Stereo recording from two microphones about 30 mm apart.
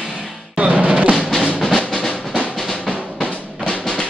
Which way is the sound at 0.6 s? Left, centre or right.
Right.